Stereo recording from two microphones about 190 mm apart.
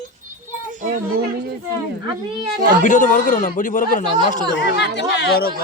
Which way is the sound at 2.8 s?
40° left (ahead or behind).